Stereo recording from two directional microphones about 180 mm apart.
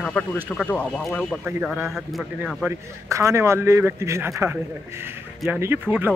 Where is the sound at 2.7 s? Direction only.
15° right (ahead or behind).